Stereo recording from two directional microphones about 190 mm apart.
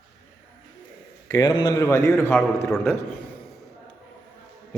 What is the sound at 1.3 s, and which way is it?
A man's voice, 20° left (ahead or behind).